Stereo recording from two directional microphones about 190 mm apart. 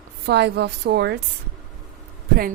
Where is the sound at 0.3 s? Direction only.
60° right (ahead or behind).